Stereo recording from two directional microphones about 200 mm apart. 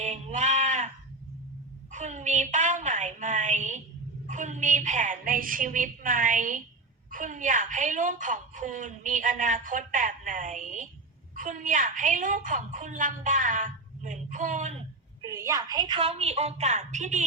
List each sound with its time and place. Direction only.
0.0 s sheep: 35° right (ahead or behind)
1.9 s a sound: 35° right (ahead or behind)
7.1 s a woman's voice: 40° right (ahead or behind)
15.3 s a woman's voice: 15° right (ahead or behind); by 17.2 s 35° right (ahead or behind)